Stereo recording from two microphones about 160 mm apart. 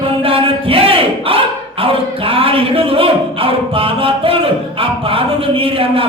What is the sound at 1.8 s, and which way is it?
Speech, 35° right (ahead or behind).